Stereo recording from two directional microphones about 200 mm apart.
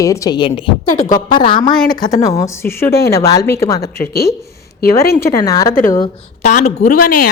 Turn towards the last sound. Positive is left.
turn(degrees=50)  # may be behind; listen again after turning